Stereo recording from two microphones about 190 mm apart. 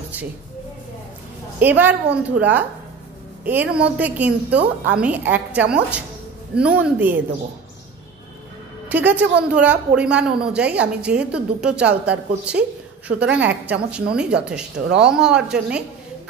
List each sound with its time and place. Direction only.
1.6 s a woman's voice: 10° right (ahead or behind)
8.8 s a woman's voice: 10° right (ahead or behind)